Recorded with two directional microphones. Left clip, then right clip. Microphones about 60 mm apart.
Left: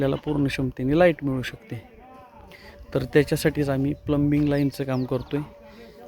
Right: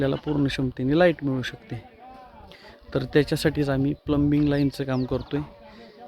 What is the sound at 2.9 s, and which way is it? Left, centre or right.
Speech, centre.